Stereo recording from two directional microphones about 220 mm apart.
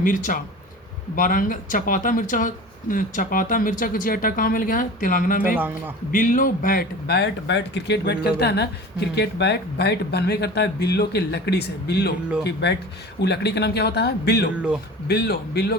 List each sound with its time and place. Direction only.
0.0 s speech: 40° left (ahead or behind)
13.1 s speech: 50° left (ahead or behind)
14.5 s speech: 5° right (ahead or behind)
15.0 s speech: 50° left (ahead or behind)